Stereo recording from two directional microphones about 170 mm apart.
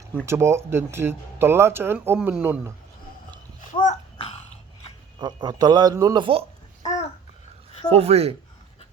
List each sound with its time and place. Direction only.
0.3 s speech: 15° right (ahead or behind)
3.7 s babbling: 40° left (ahead or behind)
5.2 s speech: 25° right (ahead or behind)
7.9 s speech: 35° right (ahead or behind)